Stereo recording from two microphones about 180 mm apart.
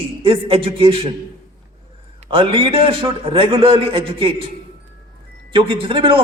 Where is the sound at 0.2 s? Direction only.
30° right (ahead or behind).